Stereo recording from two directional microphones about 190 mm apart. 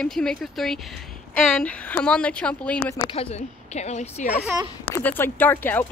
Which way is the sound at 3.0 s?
30° left (ahead or behind).